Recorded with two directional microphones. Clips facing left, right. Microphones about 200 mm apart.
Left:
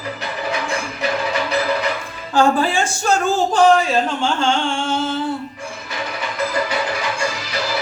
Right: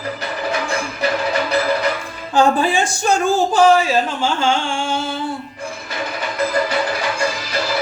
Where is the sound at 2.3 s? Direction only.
15° right (ahead or behind).